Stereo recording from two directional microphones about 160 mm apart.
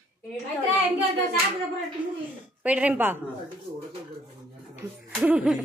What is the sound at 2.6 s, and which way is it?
Speech, 10° right (ahead or behind).